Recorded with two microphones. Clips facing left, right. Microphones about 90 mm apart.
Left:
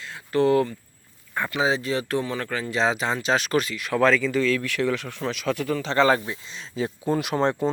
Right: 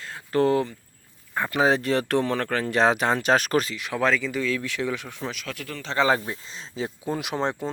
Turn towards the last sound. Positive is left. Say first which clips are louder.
# left 4 dB
turn(degrees=-15)  # may be behind; listen again after turning